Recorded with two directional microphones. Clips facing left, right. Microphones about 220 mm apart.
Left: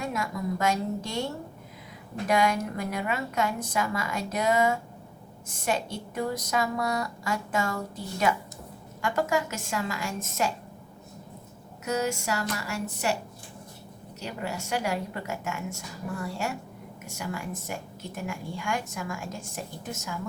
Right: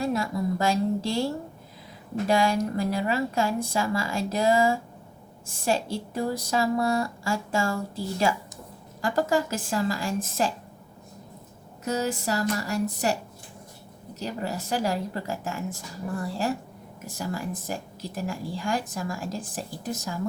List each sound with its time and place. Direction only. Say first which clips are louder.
0.0 s a woman's voice: right 5 dB; 30° right (ahead or behind)
11.9 s a woman's voice: right 1 dB; 35° right (ahead or behind)
14.2 s a woman's voice: right 3 dB; 35° right (ahead or behind)